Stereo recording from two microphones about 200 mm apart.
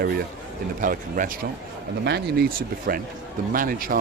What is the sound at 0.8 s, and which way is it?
Speech, 40° right (ahead or behind).